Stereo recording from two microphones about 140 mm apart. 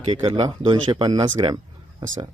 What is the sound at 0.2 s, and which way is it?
Speech, 40° right (ahead or behind).